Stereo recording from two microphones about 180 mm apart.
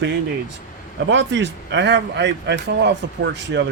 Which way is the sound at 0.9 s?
85° right.